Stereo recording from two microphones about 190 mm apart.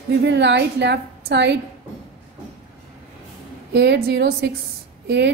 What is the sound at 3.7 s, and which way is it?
A woman's voice, 60° right (ahead or behind).